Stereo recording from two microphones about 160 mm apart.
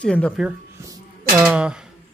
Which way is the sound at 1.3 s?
10° right (ahead or behind).